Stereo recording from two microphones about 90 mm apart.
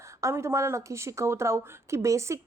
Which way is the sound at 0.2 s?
30° right (ahead or behind).